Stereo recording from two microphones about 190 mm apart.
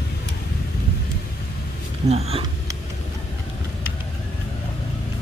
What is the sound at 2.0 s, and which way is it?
Speech, 30° right (ahead or behind).